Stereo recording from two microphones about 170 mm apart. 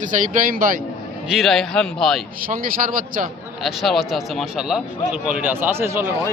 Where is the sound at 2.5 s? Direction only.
55° right (ahead or behind).